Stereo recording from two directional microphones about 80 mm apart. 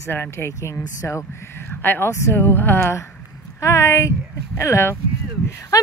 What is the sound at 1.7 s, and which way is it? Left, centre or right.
Speech, left.